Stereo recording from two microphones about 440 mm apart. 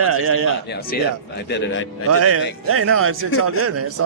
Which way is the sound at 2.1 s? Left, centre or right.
Right.